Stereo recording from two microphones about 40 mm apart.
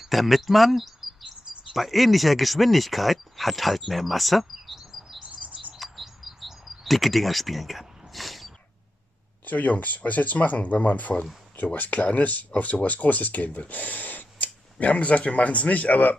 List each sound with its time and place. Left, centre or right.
0.0 s speech: centre
3.9 s chirp: centre
8.1 s sneeze: centre
9.4 s speech: left